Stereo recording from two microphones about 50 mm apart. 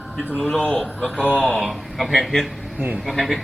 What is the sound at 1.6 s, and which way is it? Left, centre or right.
Speech, centre.